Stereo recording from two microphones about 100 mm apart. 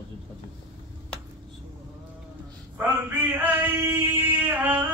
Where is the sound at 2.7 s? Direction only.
20° right (ahead or behind).